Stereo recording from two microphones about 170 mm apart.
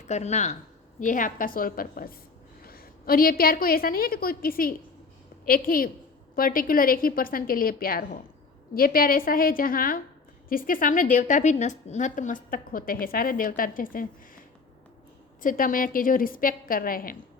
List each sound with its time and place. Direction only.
0.0 s a woman's voice: 40° left (ahead or behind)
15.4 s a woman's voice: 55° left (ahead or behind)